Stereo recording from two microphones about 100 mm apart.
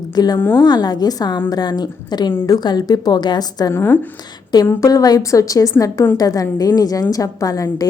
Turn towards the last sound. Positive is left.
turn(degrees=35)  # may be behind; listen again after turning